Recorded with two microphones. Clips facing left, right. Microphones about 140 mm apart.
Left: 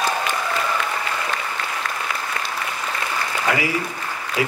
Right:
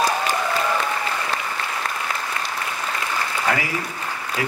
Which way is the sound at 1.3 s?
35° right (ahead or behind).